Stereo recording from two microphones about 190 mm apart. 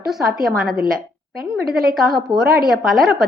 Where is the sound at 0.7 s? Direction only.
50° right (ahead or behind).